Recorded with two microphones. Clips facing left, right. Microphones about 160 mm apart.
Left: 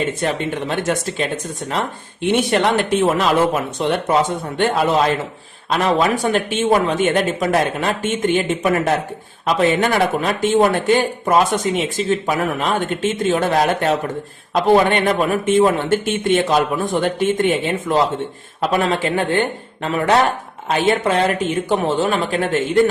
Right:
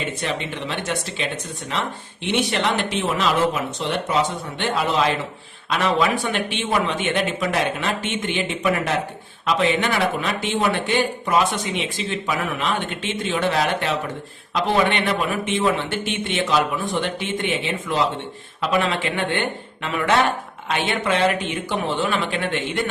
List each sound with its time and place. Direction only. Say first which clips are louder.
0.2 s speech: left 6 dB; 45° left (ahead or behind)